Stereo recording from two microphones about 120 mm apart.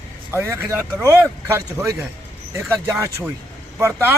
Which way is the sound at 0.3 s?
20° right (ahead or behind).